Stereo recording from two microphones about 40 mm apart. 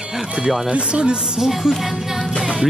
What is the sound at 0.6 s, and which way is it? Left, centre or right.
Speech, right.